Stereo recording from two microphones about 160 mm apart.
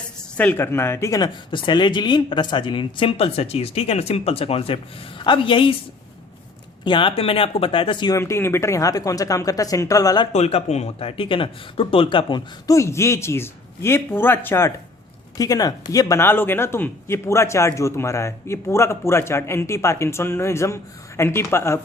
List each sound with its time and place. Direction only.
0.3 s speech: 10° left (ahead or behind); by 5.7 s 30° left (ahead or behind)
6.8 s speech: 30° left (ahead or behind)
8.2 s speech: 15° left (ahead or behind)
10.3 s speech: 45° left (ahead or behind); by 21.8 s 15° left (ahead or behind)